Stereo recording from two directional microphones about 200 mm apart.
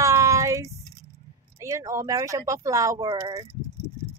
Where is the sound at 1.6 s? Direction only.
15° right (ahead or behind).